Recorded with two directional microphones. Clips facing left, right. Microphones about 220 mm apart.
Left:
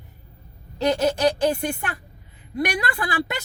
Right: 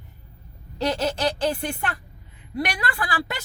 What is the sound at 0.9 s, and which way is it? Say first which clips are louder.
Speech: left 4 dB; 15° left (ahead or behind).